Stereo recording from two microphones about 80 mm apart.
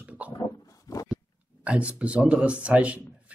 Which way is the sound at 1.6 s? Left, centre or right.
Centre.